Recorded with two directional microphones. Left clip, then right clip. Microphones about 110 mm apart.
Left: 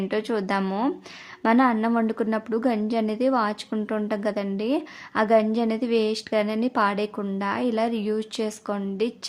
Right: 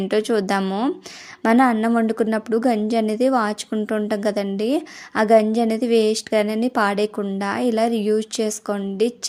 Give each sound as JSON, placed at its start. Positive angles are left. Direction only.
{"t": 0.1, "sound": "a woman's voice", "side_deg": -35}
{"t": 0.6, "sound": "speech", "side_deg": -20}
{"t": 1.4, "sound": "a woman's voice", "side_deg": -35}